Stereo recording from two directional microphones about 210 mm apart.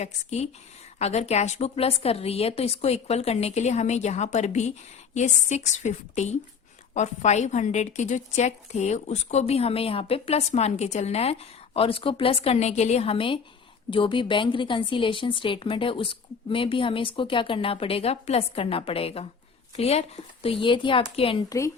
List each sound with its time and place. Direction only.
0.0 s a woman's voice: 30° left (ahead or behind)